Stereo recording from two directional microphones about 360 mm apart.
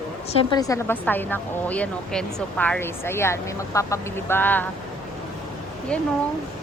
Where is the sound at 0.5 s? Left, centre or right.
Centre.